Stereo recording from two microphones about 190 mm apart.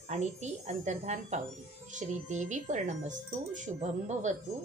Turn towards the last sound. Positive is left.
turn(degrees=-40)  # may be behind; listen again after turning